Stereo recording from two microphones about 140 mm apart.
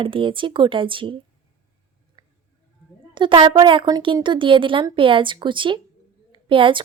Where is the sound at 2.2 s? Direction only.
35° right (ahead or behind).